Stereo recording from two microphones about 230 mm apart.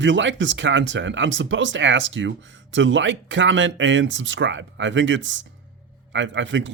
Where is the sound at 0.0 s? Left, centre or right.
Right.